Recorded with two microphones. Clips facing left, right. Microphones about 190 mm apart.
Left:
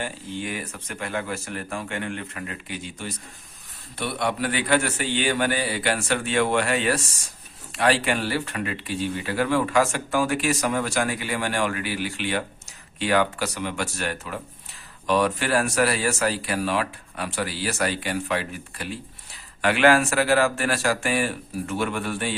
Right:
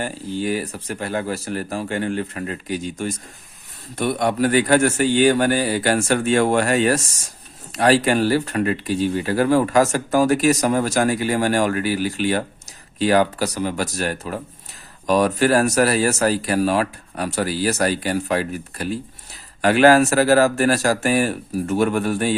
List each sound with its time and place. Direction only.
0.0 s a man's voice: 40° right (ahead or behind)